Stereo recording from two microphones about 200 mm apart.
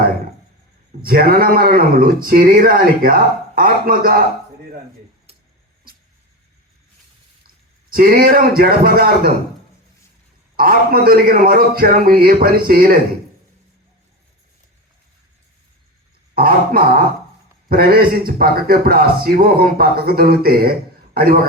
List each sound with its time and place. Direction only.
1.0 s speech: 50° right (ahead or behind)
7.4 s speech: 45° right (ahead or behind)
10.6 s speech: 45° right (ahead or behind)
16.3 s speech: 50° right (ahead or behind)